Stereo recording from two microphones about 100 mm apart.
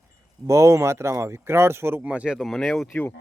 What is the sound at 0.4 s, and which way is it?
Speech, 30° right (ahead or behind).